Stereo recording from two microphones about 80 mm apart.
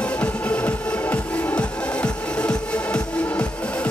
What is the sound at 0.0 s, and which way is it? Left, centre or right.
Music, centre.